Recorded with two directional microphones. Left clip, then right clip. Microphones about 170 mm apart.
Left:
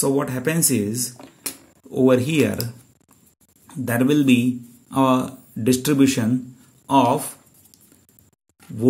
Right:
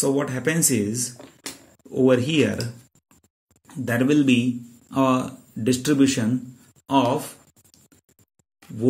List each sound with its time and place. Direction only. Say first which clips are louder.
0.0 s speech: left 1 dB; 25° left (ahead or behind)
3.6 s speech: left 1 dB; 25° left (ahead or behind)
6.9 s writing: left 3 dB; 35° left (ahead or behind)